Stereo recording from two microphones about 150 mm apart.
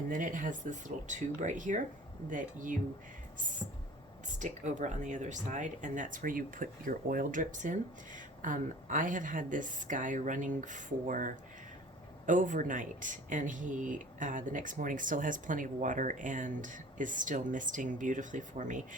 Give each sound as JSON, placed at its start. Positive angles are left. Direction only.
{"t": 0.1, "sound": "speech", "side_deg": -60}
{"t": 4.4, "sound": "speech", "side_deg": -55}